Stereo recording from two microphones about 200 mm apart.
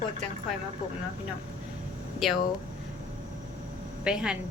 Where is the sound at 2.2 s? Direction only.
Centre (ahead or behind).